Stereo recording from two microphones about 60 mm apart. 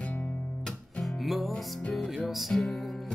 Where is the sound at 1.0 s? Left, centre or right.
Centre.